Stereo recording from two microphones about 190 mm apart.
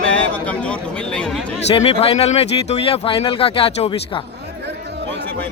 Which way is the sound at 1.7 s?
30° left (ahead or behind).